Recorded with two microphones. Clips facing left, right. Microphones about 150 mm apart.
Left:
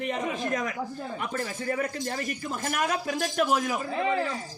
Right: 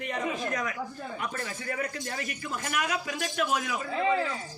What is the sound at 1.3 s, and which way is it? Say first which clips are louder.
A man's voice: left 5 dB; 35° left (ahead or behind).